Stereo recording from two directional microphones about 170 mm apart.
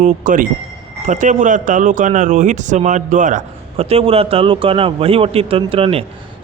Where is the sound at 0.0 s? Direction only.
50° right (ahead or behind).